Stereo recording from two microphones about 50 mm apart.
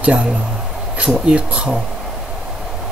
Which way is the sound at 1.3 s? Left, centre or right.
Centre.